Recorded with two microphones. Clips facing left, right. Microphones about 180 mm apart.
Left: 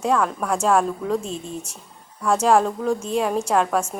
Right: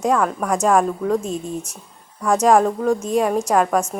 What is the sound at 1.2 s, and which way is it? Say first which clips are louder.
Speech: right 5 dB; 40° right (ahead or behind).